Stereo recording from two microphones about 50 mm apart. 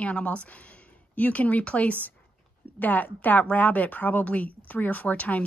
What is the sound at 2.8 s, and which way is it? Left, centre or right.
Speech, left.